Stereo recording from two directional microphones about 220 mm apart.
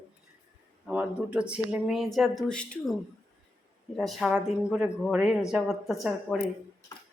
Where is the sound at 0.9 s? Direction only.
5° right (ahead or behind).